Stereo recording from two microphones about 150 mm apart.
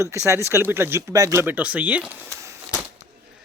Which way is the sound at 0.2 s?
15° right (ahead or behind).